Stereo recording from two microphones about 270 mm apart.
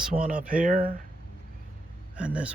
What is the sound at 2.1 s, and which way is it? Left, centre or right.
Speech, centre.